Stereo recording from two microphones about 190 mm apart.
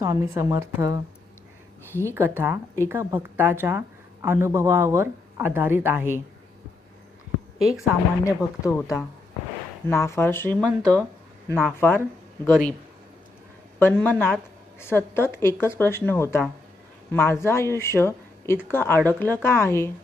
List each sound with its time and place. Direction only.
0.0 s a woman's voice: 15° right (ahead or behind)
2.0 s a woman's voice: 10° right (ahead or behind)
7.6 s a woman's voice: centre (ahead or behind)
8.2 s speech: 15° left (ahead or behind)
9.9 s speech: 15° left (ahead or behind)
13.7 s a man's voice: 10° left (ahead or behind)